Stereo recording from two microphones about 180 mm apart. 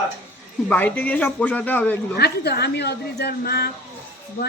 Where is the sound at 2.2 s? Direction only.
65° left (ahead or behind).